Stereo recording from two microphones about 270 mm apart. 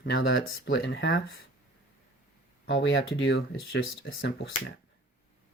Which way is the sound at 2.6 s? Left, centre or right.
Left.